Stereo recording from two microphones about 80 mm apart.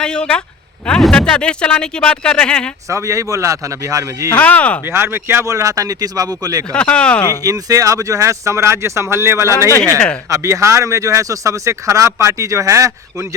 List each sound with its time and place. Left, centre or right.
0.0 s speech: centre
2.9 s speech: right
4.4 s speech: centre
4.9 s speech: right
5.5 s speech: right
6.7 s speech: centre
7.4 s speech: right